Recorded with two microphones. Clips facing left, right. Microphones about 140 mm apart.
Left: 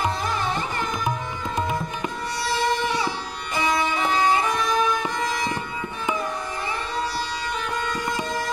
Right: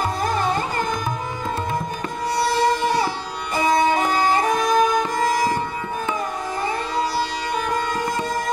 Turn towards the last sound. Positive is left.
turn(degrees=-45)  # may be behind; listen again after turning